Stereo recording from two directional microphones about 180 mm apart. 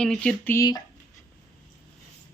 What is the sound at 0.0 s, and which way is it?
Speech, 5° left (ahead or behind).